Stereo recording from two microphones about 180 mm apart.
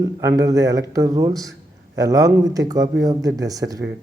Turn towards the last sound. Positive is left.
turn(degrees=-20)  # may be behind; listen again after turning